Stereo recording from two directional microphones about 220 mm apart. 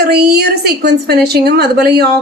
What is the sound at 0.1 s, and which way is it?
A woman's voice, 45° right (ahead or behind).